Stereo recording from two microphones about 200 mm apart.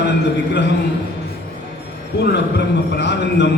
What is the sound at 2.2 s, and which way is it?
A man's voice, 60° left (ahead or behind).